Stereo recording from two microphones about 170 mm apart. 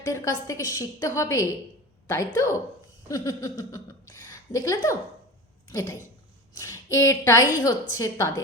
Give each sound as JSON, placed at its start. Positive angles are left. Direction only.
{"t": 0.0, "sound": "a woman's voice", "side_deg": 20}